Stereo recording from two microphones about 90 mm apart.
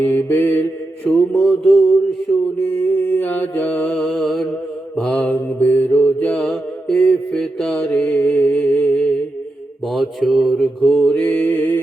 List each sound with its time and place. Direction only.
0.0 s mantra: 25° left (ahead or behind)
1.3 s mantra: 5° left (ahead or behind)
2.8 s mantra: 20° left (ahead or behind)
3.9 s mantra: 5° left (ahead or behind)
5.2 s mantra: 20° left (ahead or behind)
6.5 s mantra: 5° left (ahead or behind); by 9.0 s 20° left (ahead or behind)
9.8 s mantra: centre (ahead or behind)
11.0 s mantra: 15° left (ahead or behind)